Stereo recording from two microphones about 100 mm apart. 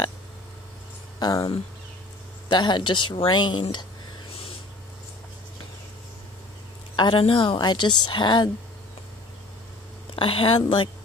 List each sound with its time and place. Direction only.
1.2 s a woman's voice: 40° left (ahead or behind)
4.3 s a sound: 75° left (ahead or behind)
7.0 s a woman's voice: 55° left (ahead or behind)
10.1 s speech: 65° left (ahead or behind)